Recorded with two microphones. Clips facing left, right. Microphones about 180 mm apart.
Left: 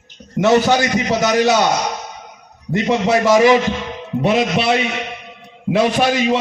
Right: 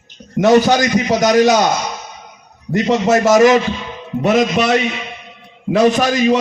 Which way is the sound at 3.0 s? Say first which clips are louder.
Right 2 dB; 45° right (ahead or behind).